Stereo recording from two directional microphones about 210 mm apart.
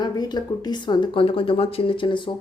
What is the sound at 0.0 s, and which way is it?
A woman's voice, 20° left (ahead or behind).